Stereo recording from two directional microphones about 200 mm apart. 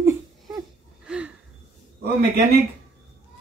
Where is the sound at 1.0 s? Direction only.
5° right (ahead or behind).